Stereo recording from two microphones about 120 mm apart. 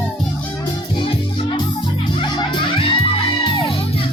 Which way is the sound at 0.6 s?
40° left (ahead or behind).